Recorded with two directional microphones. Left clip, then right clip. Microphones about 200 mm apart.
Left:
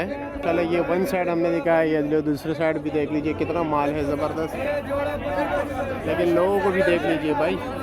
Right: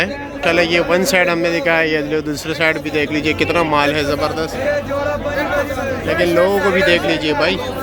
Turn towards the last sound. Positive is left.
turn(degrees=5)  # may be behind; listen again after turning